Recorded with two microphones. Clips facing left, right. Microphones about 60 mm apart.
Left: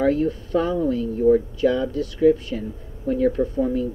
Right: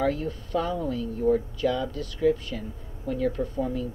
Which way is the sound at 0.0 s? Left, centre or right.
Left.